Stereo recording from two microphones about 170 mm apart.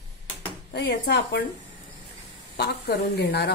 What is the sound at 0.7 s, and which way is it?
Speech, 75° left (ahead or behind).